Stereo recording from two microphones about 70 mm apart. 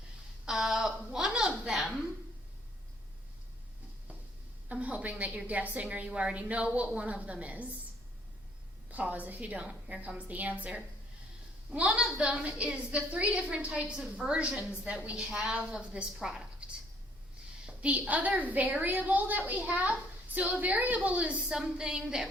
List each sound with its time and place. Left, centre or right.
0.4 s a sound: centre
4.7 s a woman's voice: right
8.9 s a woman's voice: right
14.3 s a woman's voice: centre
17.7 s a sound: centre
18.1 s a woman's voice: right